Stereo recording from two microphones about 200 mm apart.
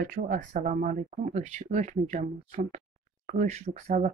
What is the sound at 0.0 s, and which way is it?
Speech, 45° right (ahead or behind).